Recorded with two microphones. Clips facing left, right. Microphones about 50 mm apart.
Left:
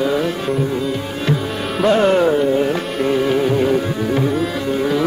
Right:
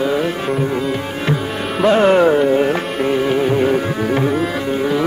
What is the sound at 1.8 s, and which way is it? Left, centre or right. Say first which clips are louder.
Speech: right 1 dB; right.